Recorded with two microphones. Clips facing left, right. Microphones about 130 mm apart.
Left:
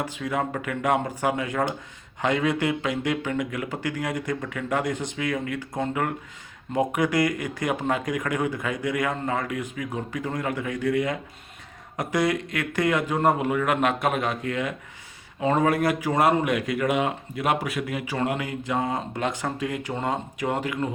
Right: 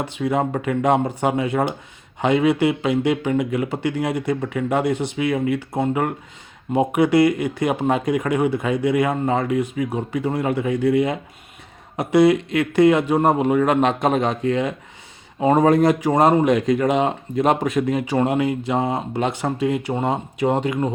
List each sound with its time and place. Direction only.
0.2 s speech: 30° right (ahead or behind)
9.9 s speech: 15° right (ahead or behind)
16.0 s speech: 40° right (ahead or behind)
16.3 s speech: 25° right (ahead or behind)
18.4 s speech: 25° right (ahead or behind)